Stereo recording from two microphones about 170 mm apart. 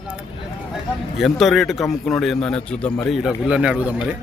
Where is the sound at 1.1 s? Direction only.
Centre (ahead or behind).